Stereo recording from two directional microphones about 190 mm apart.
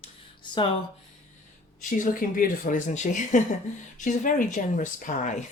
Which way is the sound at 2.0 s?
45° left (ahead or behind).